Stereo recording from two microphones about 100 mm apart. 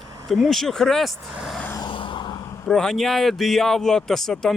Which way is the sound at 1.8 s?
55° left (ahead or behind).